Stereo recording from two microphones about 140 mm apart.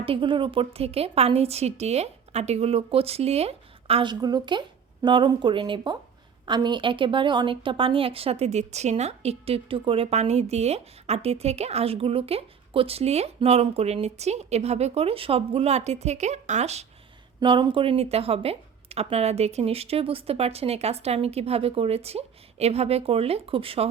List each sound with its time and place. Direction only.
0.0 s a woman's voice: 40° right (ahead or behind)
17.4 s a woman's voice: 35° right (ahead or behind)